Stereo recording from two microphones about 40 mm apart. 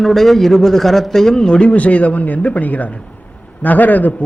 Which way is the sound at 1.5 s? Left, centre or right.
Left.